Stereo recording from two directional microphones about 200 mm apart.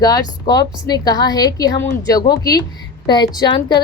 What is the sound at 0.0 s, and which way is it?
Speech, 20° left (ahead or behind).